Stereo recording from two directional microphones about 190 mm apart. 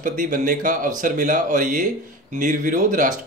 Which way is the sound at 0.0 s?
45° right (ahead or behind).